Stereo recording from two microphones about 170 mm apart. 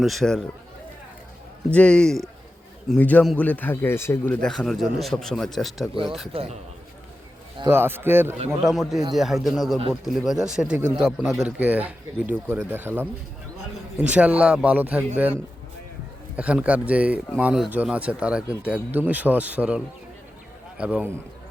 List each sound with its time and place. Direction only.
0.0 s a man's voice: centre (ahead or behind)
1.7 s a man's voice: 5° left (ahead or behind)
6.3 s a man's voice: 35° right (ahead or behind)
7.7 s speech: 15° right (ahead or behind)
8.6 s a man's voice: centre (ahead or behind)
14.1 s speech: 10° right (ahead or behind)
16.3 s speech: 10° right (ahead or behind)